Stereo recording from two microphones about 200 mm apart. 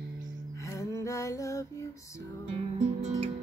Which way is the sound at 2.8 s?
35° right (ahead or behind).